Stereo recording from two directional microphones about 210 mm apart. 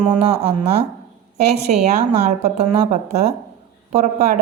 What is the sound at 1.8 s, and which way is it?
Speech, 30° right (ahead or behind).